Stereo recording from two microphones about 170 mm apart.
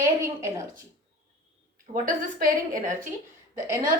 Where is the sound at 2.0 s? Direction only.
50° right (ahead or behind).